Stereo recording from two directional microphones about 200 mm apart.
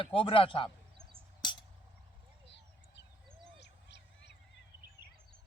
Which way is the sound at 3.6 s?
60° left (ahead or behind).